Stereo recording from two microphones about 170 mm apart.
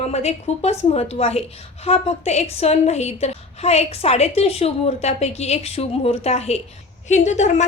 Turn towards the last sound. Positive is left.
turn(degrees=45)  # may be behind; listen again after turning